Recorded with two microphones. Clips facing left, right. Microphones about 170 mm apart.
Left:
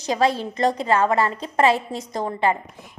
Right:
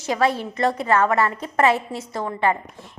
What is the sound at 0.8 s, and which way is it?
Speech, 30° left (ahead or behind).